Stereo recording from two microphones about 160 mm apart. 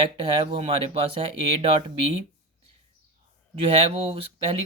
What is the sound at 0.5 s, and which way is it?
Speech, 35° right (ahead or behind).